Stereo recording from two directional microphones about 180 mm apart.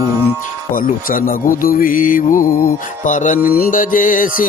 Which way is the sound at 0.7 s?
50° left (ahead or behind).